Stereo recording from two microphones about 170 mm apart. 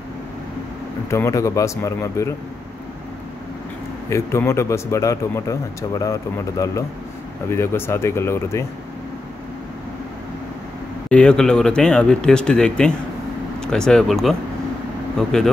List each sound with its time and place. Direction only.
1.1 s speech: 15° left (ahead or behind)
4.1 s speech: 15° left (ahead or behind)
11.1 s speech: 5° left (ahead or behind)